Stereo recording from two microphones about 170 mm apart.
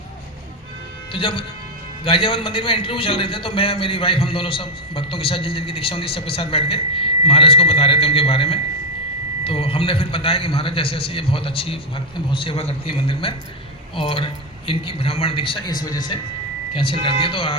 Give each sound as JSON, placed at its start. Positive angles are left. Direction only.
{"t": 1.1, "sound": "a man's voice", "side_deg": 30}